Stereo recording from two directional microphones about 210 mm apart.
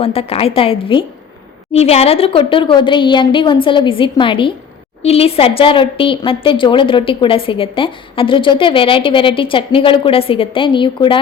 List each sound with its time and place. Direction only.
0.0 s a woman's voice: 25° left (ahead or behind)